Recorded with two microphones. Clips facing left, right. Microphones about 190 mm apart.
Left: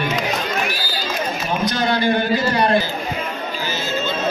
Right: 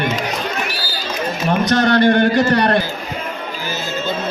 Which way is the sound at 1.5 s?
70° right (ahead or behind).